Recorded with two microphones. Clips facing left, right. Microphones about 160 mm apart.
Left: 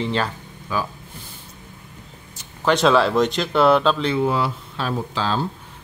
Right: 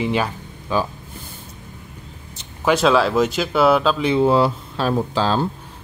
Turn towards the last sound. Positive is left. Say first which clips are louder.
# right 4 dB
turn(degrees=-40)  # may be behind; listen again after turning